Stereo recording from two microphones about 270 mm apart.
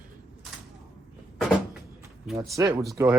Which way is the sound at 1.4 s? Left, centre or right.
Centre.